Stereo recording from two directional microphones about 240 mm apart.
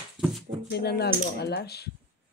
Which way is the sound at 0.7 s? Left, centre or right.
Left.